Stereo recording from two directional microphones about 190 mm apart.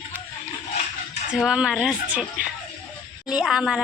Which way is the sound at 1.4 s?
5° right (ahead or behind).